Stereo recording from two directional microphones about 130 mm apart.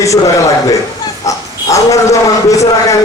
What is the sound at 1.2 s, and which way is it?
A man's voice, 25° left (ahead or behind).